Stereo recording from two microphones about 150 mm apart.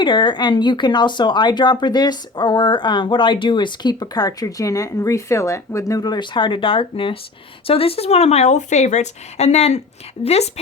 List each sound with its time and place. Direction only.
0.0 s speech: 30° left (ahead or behind)